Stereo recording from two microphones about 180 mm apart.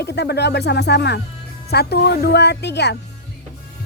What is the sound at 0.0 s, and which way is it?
Speech, 65° left (ahead or behind).